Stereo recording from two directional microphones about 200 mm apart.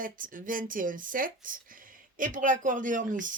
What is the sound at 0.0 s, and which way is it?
Speech, 45° right (ahead or behind).